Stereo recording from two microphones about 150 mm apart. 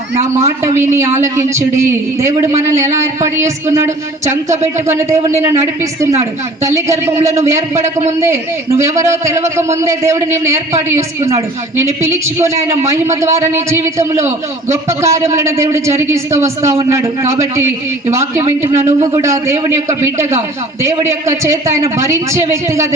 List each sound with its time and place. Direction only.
0.3 s a man's voice: 20° right (ahead or behind)